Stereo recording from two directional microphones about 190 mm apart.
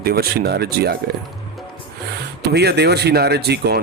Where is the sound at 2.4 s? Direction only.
60° right (ahead or behind).